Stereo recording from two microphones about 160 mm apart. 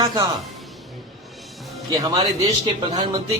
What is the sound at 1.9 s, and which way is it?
Speech, 20° right (ahead or behind).